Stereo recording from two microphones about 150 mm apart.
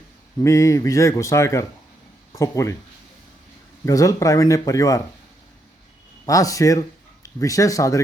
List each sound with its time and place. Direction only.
0.3 s speech: 20° left (ahead or behind)
3.8 s speech: 20° left (ahead or behind)
6.2 s speech: 20° left (ahead or behind)